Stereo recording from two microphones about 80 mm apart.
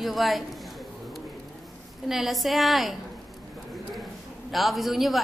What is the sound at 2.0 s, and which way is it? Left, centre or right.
Speech, centre.